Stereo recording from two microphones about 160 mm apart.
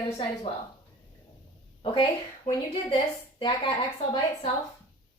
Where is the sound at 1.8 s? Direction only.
35° left (ahead or behind).